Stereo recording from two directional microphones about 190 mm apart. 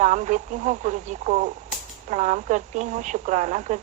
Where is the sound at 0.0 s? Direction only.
40° right (ahead or behind).